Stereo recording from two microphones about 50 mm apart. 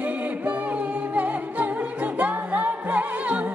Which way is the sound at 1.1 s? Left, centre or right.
Right.